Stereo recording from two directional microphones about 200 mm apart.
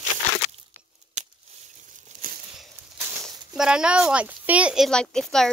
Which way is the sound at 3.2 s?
5° right (ahead or behind).